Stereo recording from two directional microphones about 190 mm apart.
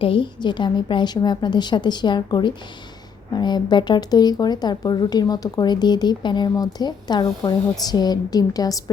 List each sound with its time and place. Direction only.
0.0 s speech: 25° left (ahead or behind)